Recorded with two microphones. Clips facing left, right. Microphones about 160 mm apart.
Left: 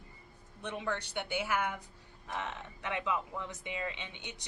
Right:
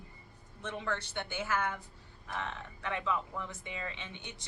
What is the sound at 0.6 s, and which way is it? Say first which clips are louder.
Speech: left 1 dB; 15° left (ahead or behind).